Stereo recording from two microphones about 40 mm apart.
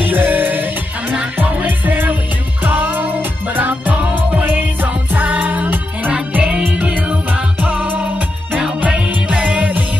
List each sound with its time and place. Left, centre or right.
0.0 s music: right
4.1 s music: right
8.9 s music: right